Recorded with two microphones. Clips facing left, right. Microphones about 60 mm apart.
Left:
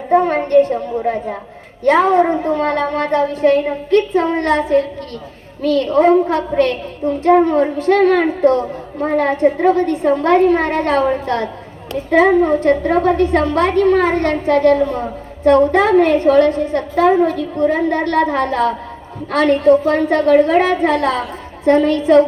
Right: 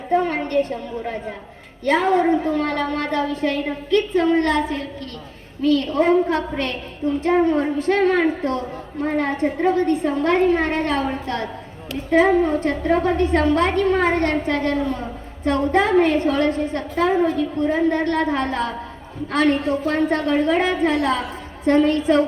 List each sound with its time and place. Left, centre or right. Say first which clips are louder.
0.1 s a child's voice: left 7 dB; left
9.9 s a woman's voice: left 5 dB; left
10.2 s a woman's voice: left 5 dB; left